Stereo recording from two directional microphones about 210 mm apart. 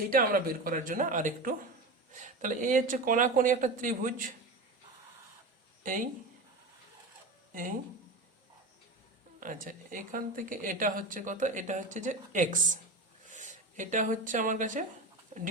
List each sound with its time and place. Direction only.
0.1 s speech: 45° right (ahead or behind)
5.8 s speech: 40° right (ahead or behind)
9.4 s speech: 40° right (ahead or behind)